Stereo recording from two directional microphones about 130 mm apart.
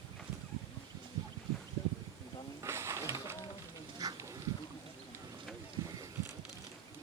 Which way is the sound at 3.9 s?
25° right (ahead or behind).